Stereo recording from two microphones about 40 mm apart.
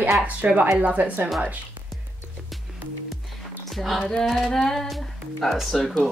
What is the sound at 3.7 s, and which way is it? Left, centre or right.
Speech, centre.